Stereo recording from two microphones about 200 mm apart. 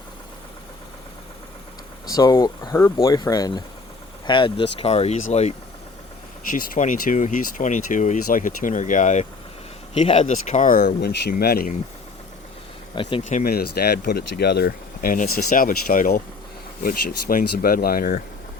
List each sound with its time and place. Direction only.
2.0 s speech: 15° left (ahead or behind); by 11.1 s 40° left (ahead or behind)
11.1 s speech: 55° left (ahead or behind)
13.0 s speech: 25° left (ahead or behind)
13.2 s speech: 40° left (ahead or behind)